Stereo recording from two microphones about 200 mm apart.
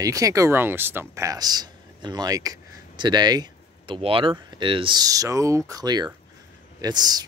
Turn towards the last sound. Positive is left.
turn(degrees=-20)  # may be behind; listen again after turning